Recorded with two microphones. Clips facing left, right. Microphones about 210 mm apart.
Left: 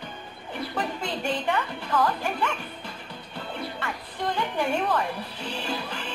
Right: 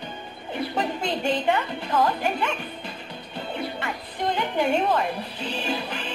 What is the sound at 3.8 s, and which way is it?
Speech, 20° right (ahead or behind).